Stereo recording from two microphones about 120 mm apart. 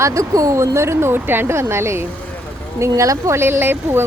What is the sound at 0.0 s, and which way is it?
Speech, 25° right (ahead or behind).